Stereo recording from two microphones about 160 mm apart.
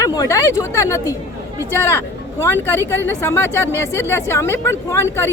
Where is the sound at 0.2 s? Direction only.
20° left (ahead or behind).